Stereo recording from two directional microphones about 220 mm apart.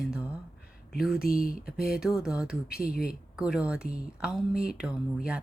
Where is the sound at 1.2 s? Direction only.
40° left (ahead or behind).